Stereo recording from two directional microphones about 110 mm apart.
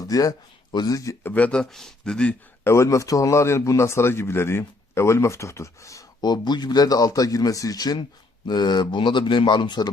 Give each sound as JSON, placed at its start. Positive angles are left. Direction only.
{"t": 0.0, "sound": "speech", "side_deg": 35}
{"t": 1.2, "sound": "speech", "side_deg": 10}
{"t": 2.6, "sound": "a man's voice", "side_deg": 25}